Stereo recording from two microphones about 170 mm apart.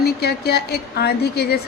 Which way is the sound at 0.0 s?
70° left (ahead or behind).